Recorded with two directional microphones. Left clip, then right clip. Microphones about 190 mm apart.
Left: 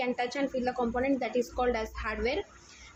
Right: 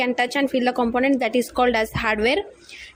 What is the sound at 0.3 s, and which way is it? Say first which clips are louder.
A woman's voice: right 10 dB; 45° right (ahead or behind).